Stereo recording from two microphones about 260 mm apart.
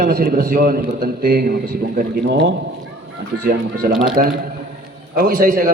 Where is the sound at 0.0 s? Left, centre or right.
Right.